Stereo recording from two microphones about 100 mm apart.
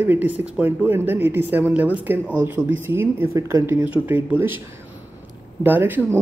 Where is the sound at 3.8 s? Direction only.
15° right (ahead or behind).